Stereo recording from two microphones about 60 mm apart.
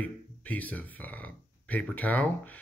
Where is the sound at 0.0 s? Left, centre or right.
Left.